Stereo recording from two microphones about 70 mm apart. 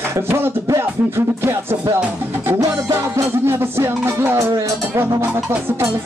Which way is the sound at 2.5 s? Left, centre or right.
Right.